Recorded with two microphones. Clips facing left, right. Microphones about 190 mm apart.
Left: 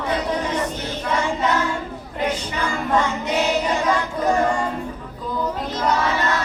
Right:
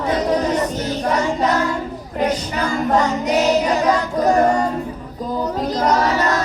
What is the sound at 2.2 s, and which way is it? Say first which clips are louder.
Female singing: right 4 dB; 40° right (ahead or behind).